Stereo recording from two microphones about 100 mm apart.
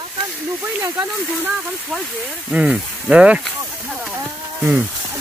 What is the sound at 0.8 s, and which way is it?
Speech, 20° right (ahead or behind).